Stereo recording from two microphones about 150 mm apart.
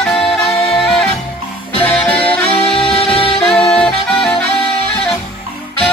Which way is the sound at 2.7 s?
35° left (ahead or behind).